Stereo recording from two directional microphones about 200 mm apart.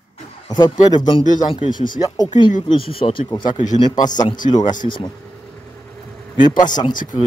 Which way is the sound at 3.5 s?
40° left (ahead or behind).